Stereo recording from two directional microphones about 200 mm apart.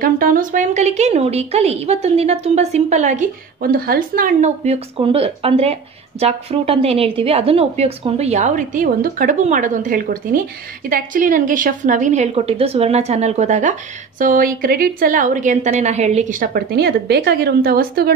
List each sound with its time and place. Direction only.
0.0 s a woman's voice: 45° right (ahead or behind)